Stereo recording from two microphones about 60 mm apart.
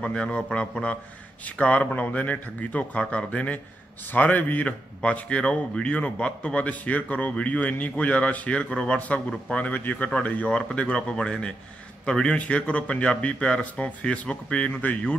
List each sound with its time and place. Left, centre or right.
0.0 s a man's voice: centre